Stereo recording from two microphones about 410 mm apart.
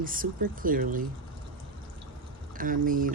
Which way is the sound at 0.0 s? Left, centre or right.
Centre.